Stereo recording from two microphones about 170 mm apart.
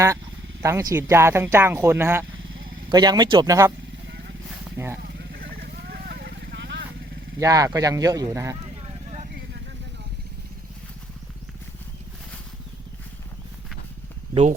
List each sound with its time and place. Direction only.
0.6 s speech: 20° right (ahead or behind)
5.0 s vehicle: 65° right (ahead or behind); by 6.8 s 90° right
7.3 s speech: 20° right (ahead or behind)